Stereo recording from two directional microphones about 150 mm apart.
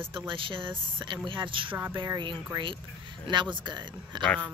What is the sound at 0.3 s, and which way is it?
Speech, 35° right (ahead or behind).